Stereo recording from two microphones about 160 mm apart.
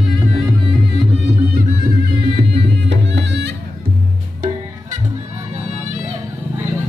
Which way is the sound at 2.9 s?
90° right.